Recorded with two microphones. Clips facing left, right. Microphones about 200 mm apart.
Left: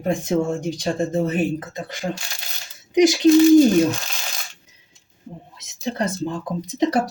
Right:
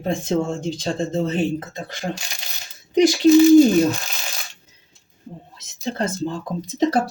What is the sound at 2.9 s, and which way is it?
Speech, 15° left (ahead or behind).